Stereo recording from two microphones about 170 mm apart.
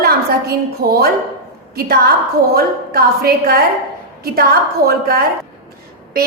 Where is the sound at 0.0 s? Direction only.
65° right (ahead or behind).